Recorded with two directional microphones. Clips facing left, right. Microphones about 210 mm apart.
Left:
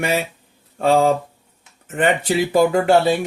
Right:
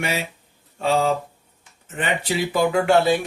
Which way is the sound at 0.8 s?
50° left (ahead or behind).